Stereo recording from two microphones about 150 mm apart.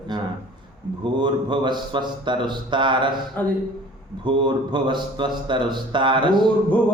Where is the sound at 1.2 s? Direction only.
30° right (ahead or behind).